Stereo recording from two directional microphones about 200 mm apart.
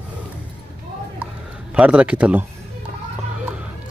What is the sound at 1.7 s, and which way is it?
Speech, 5° right (ahead or behind).